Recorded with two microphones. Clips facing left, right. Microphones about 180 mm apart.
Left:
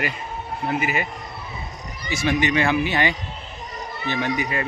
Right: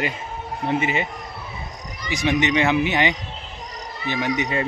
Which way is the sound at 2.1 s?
20° right (ahead or behind).